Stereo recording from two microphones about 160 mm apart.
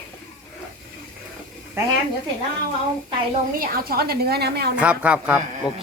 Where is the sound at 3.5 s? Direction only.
65° right (ahead or behind); by 4.7 s 85° right.